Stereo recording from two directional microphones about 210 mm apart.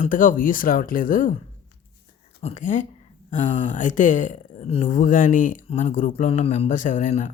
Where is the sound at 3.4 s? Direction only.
25° left (ahead or behind).